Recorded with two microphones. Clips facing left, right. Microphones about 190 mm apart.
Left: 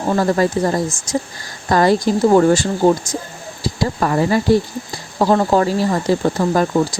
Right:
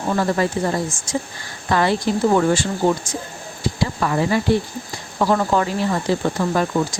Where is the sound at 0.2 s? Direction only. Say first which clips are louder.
Left 4 dB; 40° left (ahead or behind).